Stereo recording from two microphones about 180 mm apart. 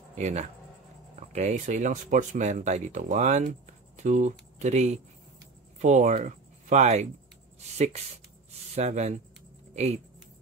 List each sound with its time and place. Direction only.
0.1 s speech: 40° right (ahead or behind)